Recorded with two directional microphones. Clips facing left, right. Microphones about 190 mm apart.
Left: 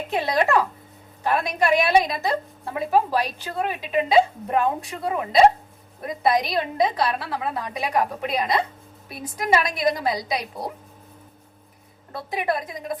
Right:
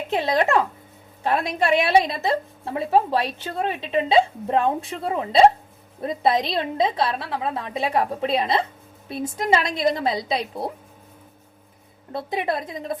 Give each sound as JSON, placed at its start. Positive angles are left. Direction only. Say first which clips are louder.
{"t": 0.1, "sound": "a woman's voice", "louder": "right 1 dB", "side_deg": -25}
{"t": 12.1, "sound": "a woman's voice", "louder": "right 1 dB", "side_deg": -25}